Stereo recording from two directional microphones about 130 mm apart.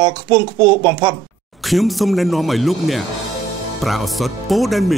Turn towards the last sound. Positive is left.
turn(degrees=0)  # may be behind; listen again after turning